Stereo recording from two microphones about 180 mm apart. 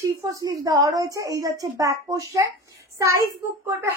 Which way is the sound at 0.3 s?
20° right (ahead or behind).